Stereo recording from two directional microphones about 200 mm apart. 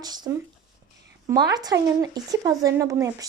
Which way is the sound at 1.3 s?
20° right (ahead or behind).